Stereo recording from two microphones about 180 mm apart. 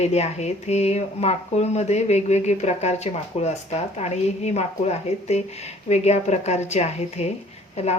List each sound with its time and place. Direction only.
0.0 s speech: 35° left (ahead or behind)